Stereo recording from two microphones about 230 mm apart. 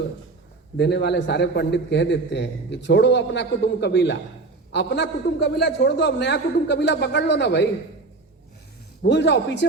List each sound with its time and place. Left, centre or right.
0.8 s a man's voice: left
9.0 s a man's voice: left